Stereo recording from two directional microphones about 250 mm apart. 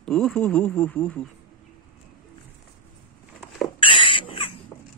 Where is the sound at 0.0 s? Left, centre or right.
Centre.